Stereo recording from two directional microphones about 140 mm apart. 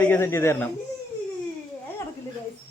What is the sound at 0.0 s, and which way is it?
Speech, 15° left (ahead or behind).